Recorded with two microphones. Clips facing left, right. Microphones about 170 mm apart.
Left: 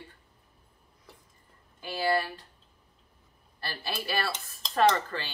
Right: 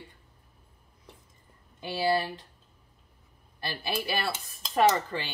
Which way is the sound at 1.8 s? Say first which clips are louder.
Right 1 dB; 20° right (ahead or behind).